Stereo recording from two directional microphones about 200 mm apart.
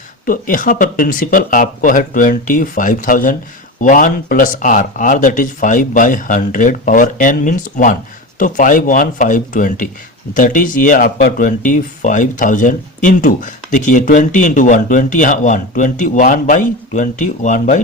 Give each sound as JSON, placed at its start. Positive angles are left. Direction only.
{"t": 0.3, "sound": "speech", "side_deg": 45}